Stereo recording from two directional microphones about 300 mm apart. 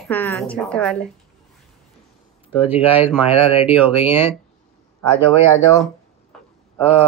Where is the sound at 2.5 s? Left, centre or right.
Centre.